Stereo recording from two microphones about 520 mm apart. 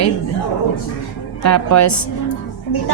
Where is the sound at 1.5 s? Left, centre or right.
Left.